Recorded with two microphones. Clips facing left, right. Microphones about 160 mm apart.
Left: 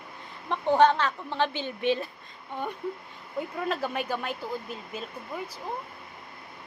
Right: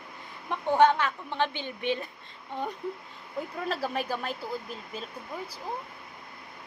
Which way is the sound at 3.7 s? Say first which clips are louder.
Even; 35° right (ahead or behind).